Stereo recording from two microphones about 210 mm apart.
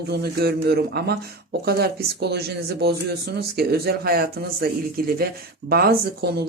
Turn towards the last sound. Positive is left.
turn(degrees=-50)  # may be behind; listen again after turning